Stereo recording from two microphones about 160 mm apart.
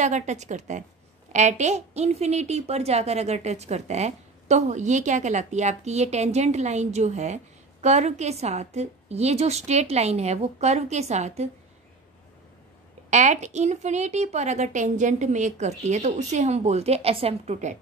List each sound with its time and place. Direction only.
0.0 s a woman's voice: 45° right (ahead or behind)
13.1 s a woman's voice: 45° right (ahead or behind)